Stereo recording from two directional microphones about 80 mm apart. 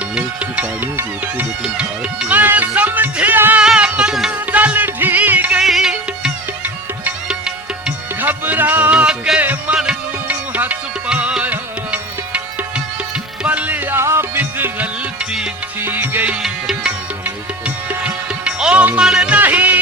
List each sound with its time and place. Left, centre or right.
0.2 s music: centre
3.6 s music: centre
4.3 s music: centre
5.5 s music: centre
8.2 s music: right
9.4 s music: right
14.0 s music: right
16.4 s music: centre
18.0 s music: centre
19.4 s music: right